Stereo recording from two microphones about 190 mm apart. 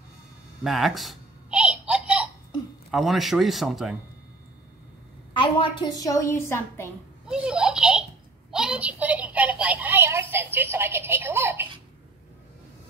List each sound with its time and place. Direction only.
0.7 s babbling: centre (ahead or behind)
2.9 s a man's voice: centre (ahead or behind)
5.4 s a woman's voice: 25° left (ahead or behind)
7.2 s a sound: 5° right (ahead or behind)